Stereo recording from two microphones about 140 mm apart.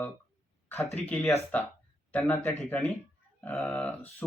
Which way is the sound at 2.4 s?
10° left (ahead or behind).